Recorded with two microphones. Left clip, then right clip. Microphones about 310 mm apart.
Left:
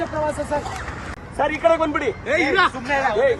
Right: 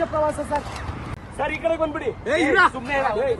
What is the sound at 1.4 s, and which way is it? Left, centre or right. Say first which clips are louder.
Speech: left 6 dB; left.